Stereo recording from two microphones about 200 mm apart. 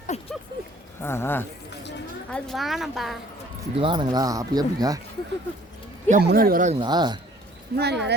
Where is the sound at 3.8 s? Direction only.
25° right (ahead or behind).